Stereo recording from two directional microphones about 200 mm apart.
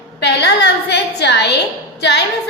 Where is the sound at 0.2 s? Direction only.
60° left (ahead or behind).